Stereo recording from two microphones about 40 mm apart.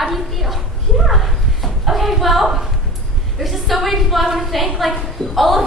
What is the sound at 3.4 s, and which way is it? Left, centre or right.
A woman's voice, centre.